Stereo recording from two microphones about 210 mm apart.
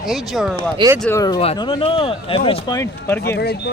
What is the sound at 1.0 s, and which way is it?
Speech, 15° left (ahead or behind).